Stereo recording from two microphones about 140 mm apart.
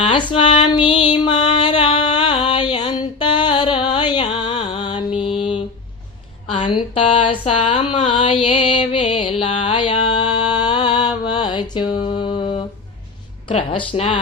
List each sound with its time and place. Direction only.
0.1 s music: 40° left (ahead or behind)
6.5 s a sound: 35° left (ahead or behind)
9.7 s music: 40° left (ahead or behind)
10.5 s mantra: 30° left (ahead or behind)
13.5 s speech: 40° left (ahead or behind)